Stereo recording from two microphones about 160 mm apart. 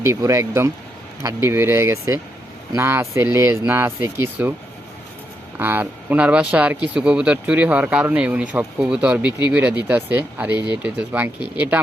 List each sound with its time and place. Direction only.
0.0 s speech: 20° right (ahead or behind)
5.5 s speech: 10° right (ahead or behind)